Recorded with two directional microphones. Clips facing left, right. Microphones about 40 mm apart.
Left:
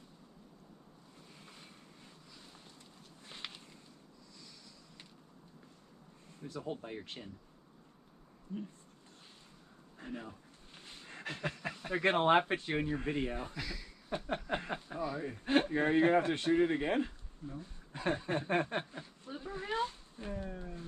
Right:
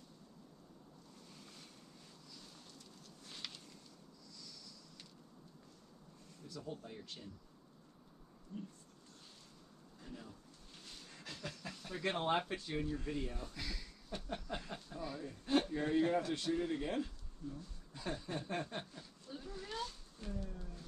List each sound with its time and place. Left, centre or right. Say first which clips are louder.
1.3 s waves: left 3 dB; left
2.3 s a sound: right 1 dB; left
6.4 s a man's voice: left 6 dB; left
8.5 s speech: left 6 dB; left
9.9 s speech: left 8 dB; left
10.7 s speech: left 5 dB; left
13.6 s speech: left 4 dB; centre
14.0 s a man's voice: left 7 dB; left